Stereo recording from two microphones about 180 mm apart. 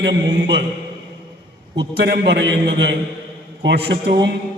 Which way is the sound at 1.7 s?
70° right (ahead or behind).